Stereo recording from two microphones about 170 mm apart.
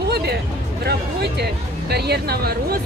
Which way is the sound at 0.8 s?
75° right (ahead or behind).